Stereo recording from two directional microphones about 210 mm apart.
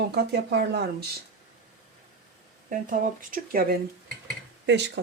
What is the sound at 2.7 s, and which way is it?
Speech, 40° right (ahead or behind).